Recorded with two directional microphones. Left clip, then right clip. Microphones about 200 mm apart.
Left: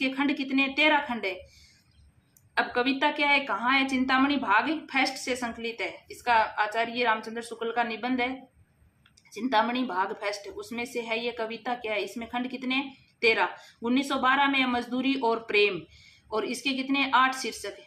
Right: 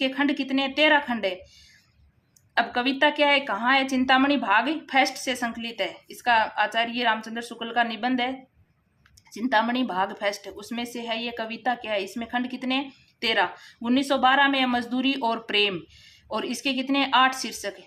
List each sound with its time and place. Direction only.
0.0 s a woman's voice: 45° right (ahead or behind)
2.6 s a woman's voice: 45° right (ahead or behind)
9.3 s a woman's voice: 45° right (ahead or behind)